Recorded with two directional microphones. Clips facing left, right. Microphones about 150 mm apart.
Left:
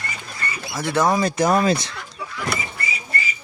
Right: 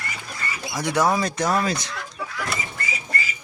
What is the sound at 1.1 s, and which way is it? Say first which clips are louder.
Speech: left 3 dB; centre (ahead or behind).